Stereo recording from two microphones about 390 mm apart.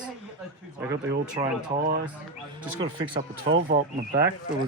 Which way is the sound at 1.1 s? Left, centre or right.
Centre.